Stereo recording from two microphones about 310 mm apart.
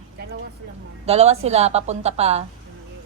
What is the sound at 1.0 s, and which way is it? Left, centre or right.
A woman's voice, centre.